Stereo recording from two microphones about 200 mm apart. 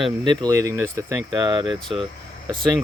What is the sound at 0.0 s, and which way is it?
Speech, 20° right (ahead or behind).